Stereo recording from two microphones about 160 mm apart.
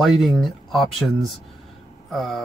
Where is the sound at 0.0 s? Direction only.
Centre (ahead or behind).